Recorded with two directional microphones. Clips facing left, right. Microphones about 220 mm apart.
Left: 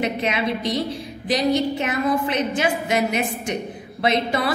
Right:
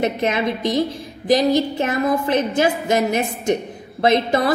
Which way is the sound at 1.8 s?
45° right (ahead or behind).